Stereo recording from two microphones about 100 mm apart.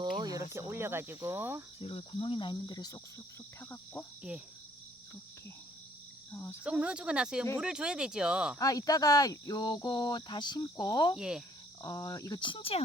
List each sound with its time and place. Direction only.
0.0 s cricket: 40° right (ahead or behind)
0.7 s speech: 25° right (ahead or behind)
1.8 s cricket: 70° left (ahead or behind); by 3.0 s 40° left (ahead or behind)
3.6 s cricket: 25° left (ahead or behind)
6.3 s cricket: 25° left (ahead or behind)
6.7 s speech: 10° right (ahead or behind)
8.5 s speech: 35° left (ahead or behind)
11.2 s speech: 5° right (ahead or behind)
11.8 s speech: 35° left (ahead or behind)
12.4 s speech: 55° left (ahead or behind)